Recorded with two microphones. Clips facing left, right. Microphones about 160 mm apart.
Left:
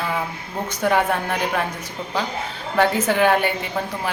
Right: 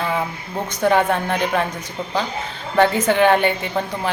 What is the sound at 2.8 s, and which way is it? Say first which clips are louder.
Speech: right 3 dB; 5° left (ahead or behind).